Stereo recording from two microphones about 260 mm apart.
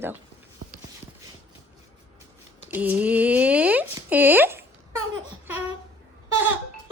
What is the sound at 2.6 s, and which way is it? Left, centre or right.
Speech, centre.